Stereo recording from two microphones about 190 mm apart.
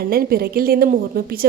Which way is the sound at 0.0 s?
50° right (ahead or behind).